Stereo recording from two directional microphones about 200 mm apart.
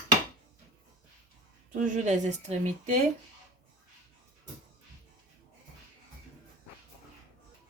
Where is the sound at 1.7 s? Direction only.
40° right (ahead or behind).